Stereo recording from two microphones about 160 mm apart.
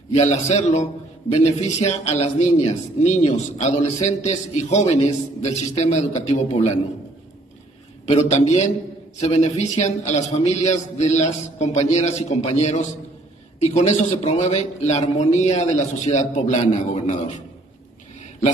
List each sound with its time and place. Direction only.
0.1 s a man's voice: 45° left (ahead or behind)
8.1 s a man's voice: 45° left (ahead or behind)